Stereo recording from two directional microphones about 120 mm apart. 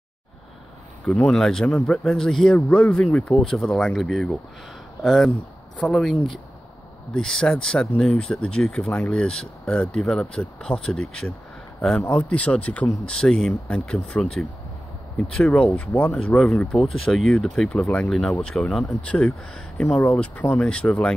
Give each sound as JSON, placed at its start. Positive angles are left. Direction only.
{"t": 1.0, "sound": "speech", "side_deg": 5}